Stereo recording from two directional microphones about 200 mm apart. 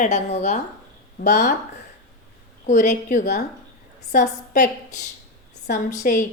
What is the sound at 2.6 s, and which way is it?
A woman's voice, 40° left (ahead or behind).